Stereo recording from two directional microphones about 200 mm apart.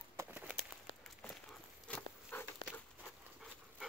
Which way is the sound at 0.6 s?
Centre (ahead or behind).